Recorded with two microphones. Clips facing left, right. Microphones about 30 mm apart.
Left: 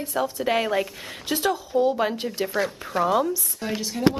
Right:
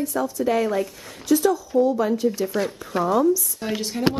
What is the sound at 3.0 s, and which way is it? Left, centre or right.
Speech, centre.